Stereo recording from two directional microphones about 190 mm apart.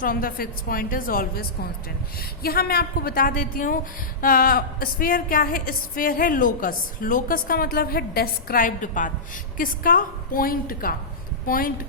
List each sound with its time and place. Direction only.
0.0 s a woman's voice: 50° left (ahead or behind)